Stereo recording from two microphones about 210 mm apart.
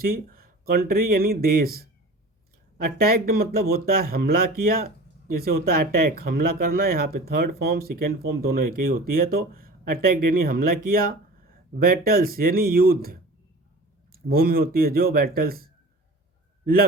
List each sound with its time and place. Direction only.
0.0 s speech: 45° right (ahead or behind)